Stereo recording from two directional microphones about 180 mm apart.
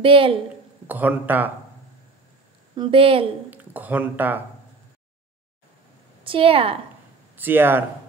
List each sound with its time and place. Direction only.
0.0 s speech: 30° right (ahead or behind)
0.8 s speech: 10° right (ahead or behind)
2.7 s speech: 30° right (ahead or behind)
3.4 s speech: 10° right (ahead or behind)
6.2 s speech: 30° right (ahead or behind)
7.3 s speech: 10° right (ahead or behind)